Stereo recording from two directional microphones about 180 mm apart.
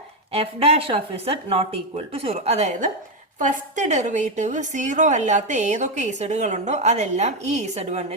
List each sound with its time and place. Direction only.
0.3 s a woman's voice: 30° right (ahead or behind)